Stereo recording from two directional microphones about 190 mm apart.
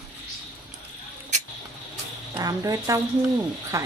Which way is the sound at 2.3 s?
20° right (ahead or behind).